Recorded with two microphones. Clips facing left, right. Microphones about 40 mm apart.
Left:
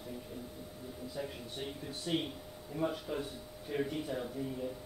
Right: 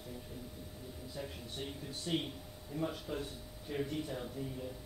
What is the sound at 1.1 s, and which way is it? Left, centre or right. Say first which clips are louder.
A man's voice: left 2 dB; centre.